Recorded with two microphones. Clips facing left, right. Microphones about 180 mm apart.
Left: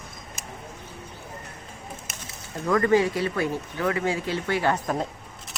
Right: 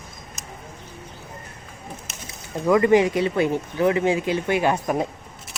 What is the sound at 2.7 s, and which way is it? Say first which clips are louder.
Speech: right 4 dB; 15° right (ahead or behind).